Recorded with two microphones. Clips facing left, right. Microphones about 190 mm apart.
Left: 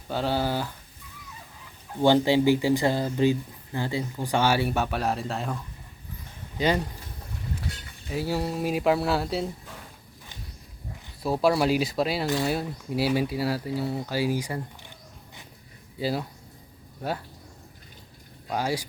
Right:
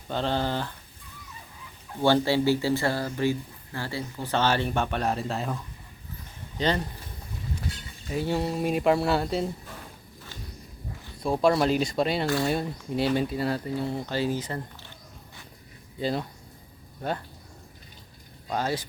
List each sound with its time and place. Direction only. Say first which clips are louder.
0.1 s speech: left 1 dB; 5° left (ahead or behind)
2.0 s speech: left 2 dB; 15° left (ahead or behind); by 5.5 s centre (ahead or behind)
6.6 s speech: left 2 dB; 10° left (ahead or behind)
8.1 s speech: right 1 dB; 5° left (ahead or behind)
11.2 s speech: even; 5° left (ahead or behind)
16.0 s speech: even; 5° left (ahead or behind)
18.4 s speech: left 1 dB; 10° left (ahead or behind)